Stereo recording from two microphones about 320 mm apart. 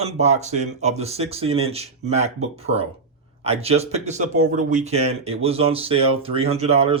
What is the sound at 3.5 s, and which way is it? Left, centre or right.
Speech, centre.